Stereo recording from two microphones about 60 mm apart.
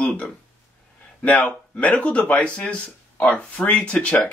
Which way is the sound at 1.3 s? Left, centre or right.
Left.